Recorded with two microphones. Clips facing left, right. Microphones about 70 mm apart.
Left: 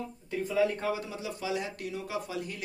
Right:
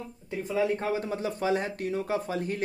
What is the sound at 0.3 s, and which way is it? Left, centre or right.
Speech, right.